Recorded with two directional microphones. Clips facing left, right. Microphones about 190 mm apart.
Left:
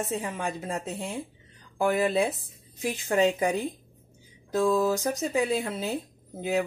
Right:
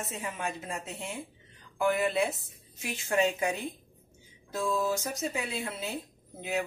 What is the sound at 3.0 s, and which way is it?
Speech, 30° left (ahead or behind).